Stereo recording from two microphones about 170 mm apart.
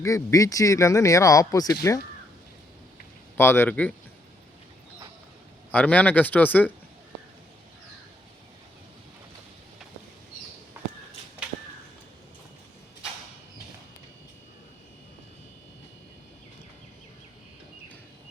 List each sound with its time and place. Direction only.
0.0 s speech: 20° left (ahead or behind)
3.3 s speech: 15° left (ahead or behind)
5.7 s speech: 10° left (ahead or behind)